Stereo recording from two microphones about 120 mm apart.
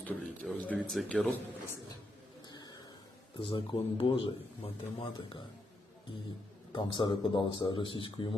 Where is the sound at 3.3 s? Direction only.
45° left (ahead or behind).